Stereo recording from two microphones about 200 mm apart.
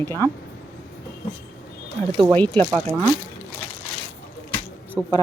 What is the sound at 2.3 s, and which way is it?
Speech, 10° left (ahead or behind).